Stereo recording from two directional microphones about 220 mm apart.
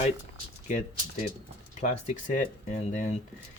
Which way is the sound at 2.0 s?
30° left (ahead or behind).